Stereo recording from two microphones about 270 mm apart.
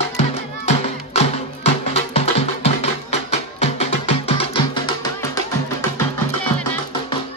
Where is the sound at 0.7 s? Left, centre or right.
Left.